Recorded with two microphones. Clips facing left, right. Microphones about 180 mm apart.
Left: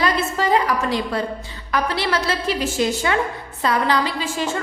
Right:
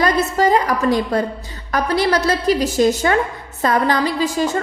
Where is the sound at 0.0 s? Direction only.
40° right (ahead or behind).